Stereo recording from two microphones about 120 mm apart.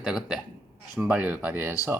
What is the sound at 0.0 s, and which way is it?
A man's voice, centre (ahead or behind).